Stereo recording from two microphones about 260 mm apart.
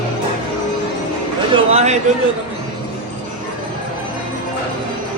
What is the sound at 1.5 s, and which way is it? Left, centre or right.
Speech, right.